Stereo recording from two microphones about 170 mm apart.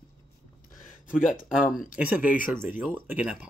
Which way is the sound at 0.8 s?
50° left (ahead or behind).